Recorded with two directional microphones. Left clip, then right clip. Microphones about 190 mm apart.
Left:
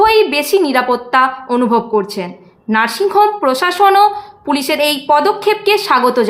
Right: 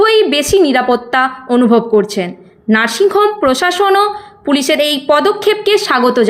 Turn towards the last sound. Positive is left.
turn(degrees=-15)  # may be behind; listen again after turning